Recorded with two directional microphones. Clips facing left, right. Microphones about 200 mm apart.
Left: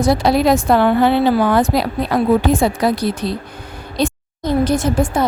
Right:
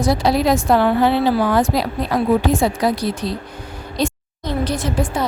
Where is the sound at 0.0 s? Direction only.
60° left (ahead or behind).